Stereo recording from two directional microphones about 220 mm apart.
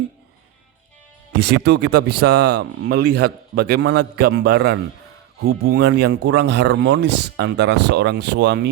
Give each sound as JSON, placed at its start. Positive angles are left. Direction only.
{"t": 1.5, "sound": "speech", "side_deg": -50}